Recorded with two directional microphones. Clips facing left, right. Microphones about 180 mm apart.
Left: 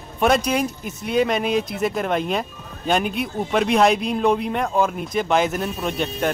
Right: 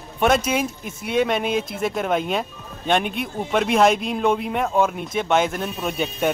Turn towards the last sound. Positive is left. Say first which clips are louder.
# even
turn(degrees=-5)  # may be behind; listen again after turning